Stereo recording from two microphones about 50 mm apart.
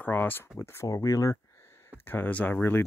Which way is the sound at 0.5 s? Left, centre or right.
Left.